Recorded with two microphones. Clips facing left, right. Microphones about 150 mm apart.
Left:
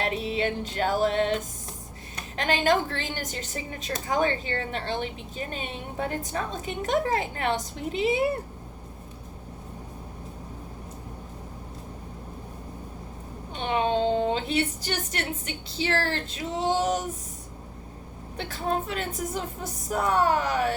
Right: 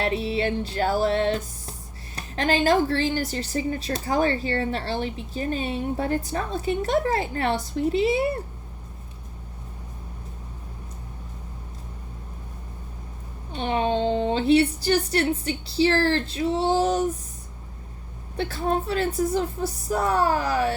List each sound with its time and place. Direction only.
0.0 s music: 35° right (ahead or behind)
2.1 s a woman's voice: 35° right (ahead or behind)
13.5 s a child's voice: 35° right (ahead or behind)
18.9 s a woman's voice: 35° right (ahead or behind)